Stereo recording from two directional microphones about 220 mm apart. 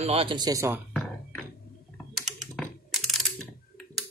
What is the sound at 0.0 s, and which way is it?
Speech, 25° right (ahead or behind).